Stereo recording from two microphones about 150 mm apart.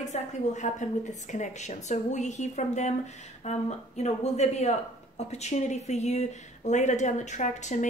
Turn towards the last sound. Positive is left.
turn(degrees=50)  # may be behind; listen again after turning